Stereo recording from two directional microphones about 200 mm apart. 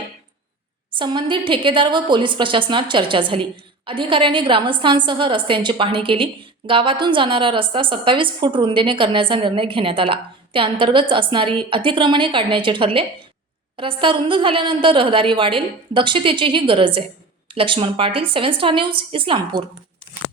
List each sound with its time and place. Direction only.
0.9 s a woman's voice: 25° right (ahead or behind)